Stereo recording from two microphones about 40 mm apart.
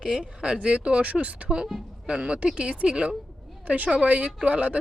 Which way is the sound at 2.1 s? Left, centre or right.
Right.